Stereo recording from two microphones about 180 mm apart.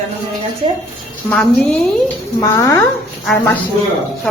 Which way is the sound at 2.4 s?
15° left (ahead or behind).